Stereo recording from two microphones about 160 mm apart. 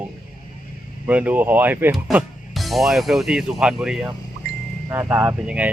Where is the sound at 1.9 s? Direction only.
Centre (ahead or behind).